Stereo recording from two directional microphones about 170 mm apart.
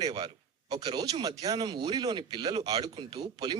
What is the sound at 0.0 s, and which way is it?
A man's voice, 25° right (ahead or behind).